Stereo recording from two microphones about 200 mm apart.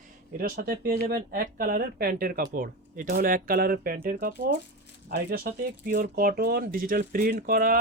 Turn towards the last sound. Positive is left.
turn(degrees=-45)  # may be behind; listen again after turning